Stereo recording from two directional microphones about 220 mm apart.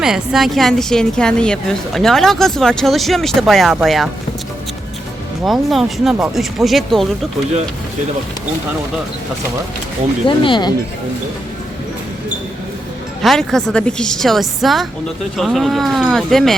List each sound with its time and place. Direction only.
0.0 s a woman's voice: centre (ahead or behind)
5.5 s a woman's voice: centre (ahead or behind)
10.2 s speech: 20° left (ahead or behind)
13.2 s a woman's voice: centre (ahead or behind)